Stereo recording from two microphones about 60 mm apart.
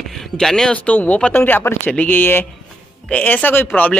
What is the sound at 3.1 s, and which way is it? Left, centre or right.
Speech, left.